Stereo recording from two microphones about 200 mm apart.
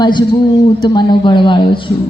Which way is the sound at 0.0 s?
20° left (ahead or behind).